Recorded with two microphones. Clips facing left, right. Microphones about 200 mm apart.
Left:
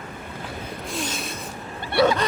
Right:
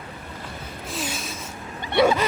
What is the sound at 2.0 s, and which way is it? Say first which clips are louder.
Speech: even; 10° right (ahead or behind).